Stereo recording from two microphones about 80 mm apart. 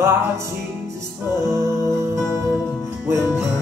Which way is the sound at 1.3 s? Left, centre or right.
Right.